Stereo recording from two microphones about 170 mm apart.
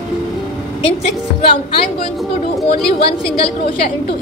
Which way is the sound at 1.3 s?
35° left (ahead or behind).